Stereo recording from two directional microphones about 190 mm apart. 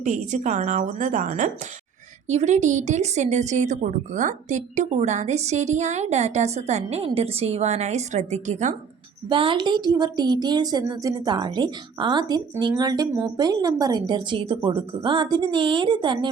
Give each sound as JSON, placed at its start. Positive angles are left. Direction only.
{"t": 0.0, "sound": "a woman's voice", "side_deg": -40}
{"t": 9.3, "sound": "speech", "side_deg": -25}